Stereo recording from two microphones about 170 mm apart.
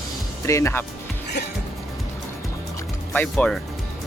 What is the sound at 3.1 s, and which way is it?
Speech, 10° left (ahead or behind).